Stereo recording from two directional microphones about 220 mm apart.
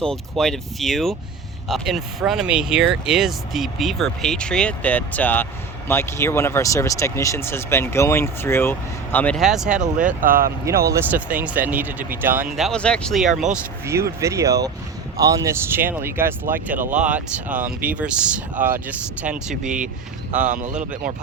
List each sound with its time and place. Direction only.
0.0 s speech: centre (ahead or behind)
10.2 s speech: 40° right (ahead or behind)
10.8 s speech: 10° right (ahead or behind)
20.3 s speech: 35° right (ahead or behind)